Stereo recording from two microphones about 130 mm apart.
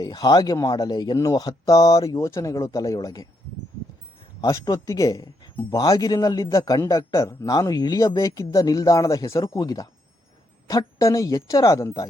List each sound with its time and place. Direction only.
0.0 s a man's voice: 30° left (ahead or behind)
4.4 s a man's voice: 30° left (ahead or behind)